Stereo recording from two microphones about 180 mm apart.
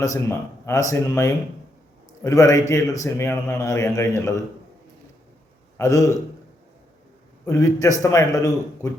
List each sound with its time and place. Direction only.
0.0 s a man's voice: 15° left (ahead or behind)
5.7 s a man's voice: 15° left (ahead or behind)
7.4 s a man's voice: 15° left (ahead or behind)